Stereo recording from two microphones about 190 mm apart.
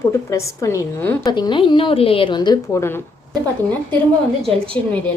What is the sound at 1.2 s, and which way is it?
A woman's voice, 20° left (ahead or behind).